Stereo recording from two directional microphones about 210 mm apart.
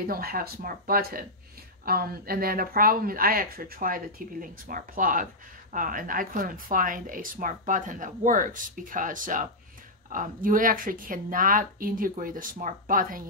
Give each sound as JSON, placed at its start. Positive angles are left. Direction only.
{"t": 0.0, "sound": "speech", "side_deg": -45}